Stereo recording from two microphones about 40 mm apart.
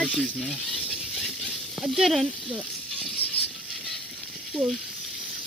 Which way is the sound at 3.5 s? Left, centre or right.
Right.